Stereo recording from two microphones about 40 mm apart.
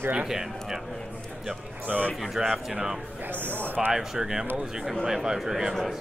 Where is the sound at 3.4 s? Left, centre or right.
Right.